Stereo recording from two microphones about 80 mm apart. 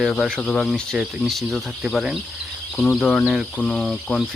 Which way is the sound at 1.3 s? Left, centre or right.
Centre.